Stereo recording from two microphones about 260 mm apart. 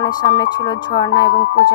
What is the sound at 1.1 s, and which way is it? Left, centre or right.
Speech, left.